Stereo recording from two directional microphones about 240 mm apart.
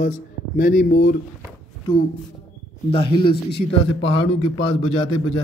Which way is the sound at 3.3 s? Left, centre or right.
Left.